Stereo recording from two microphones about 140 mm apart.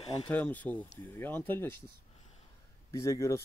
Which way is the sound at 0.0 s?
40° left (ahead or behind).